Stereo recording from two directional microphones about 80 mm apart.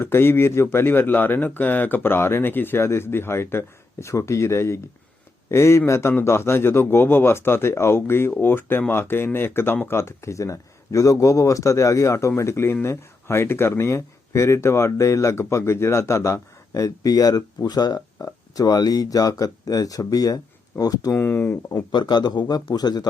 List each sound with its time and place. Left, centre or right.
0.0 s speech: left
21.2 s speech: left
21.9 s speech: left